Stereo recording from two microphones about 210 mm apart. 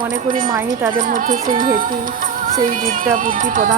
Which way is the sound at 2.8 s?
40° right (ahead or behind).